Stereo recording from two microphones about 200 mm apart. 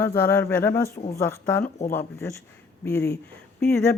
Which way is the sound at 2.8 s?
15° left (ahead or behind).